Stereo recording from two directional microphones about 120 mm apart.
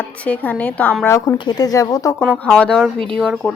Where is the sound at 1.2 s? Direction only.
35° left (ahead or behind).